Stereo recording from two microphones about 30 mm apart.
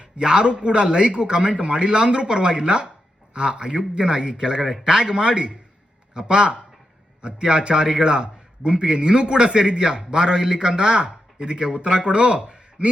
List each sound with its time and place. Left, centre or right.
0.0 s a man's voice: right